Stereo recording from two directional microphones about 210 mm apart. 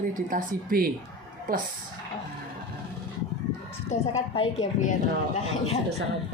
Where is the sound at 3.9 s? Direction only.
35° left (ahead or behind).